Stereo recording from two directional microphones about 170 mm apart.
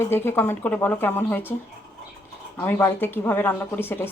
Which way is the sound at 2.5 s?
10° left (ahead or behind).